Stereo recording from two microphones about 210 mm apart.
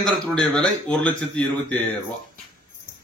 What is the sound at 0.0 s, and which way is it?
Speech, centre (ahead or behind).